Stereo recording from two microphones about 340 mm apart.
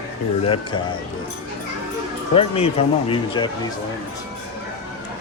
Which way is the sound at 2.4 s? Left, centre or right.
Centre.